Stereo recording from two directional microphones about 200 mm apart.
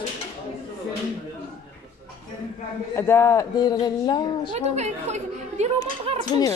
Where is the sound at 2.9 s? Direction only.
10° left (ahead or behind).